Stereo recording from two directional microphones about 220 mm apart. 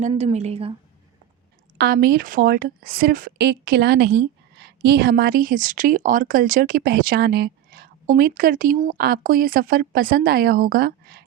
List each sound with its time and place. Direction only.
0.0 s a woman's voice: 25° right (ahead or behind)
1.8 s speech: 45° right (ahead or behind)